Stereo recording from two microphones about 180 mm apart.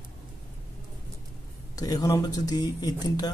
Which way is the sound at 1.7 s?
20° left (ahead or behind).